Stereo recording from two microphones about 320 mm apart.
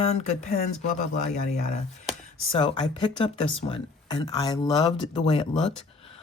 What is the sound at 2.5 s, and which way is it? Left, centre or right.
Speech, centre.